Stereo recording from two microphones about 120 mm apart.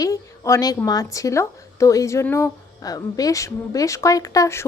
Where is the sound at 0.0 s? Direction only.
25° left (ahead or behind).